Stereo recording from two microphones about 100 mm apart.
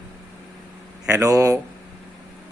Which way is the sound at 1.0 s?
35° right (ahead or behind).